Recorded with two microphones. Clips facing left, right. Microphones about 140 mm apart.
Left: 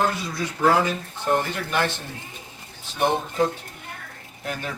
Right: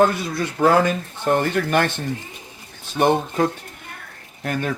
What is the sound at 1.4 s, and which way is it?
Speech, 55° right (ahead or behind).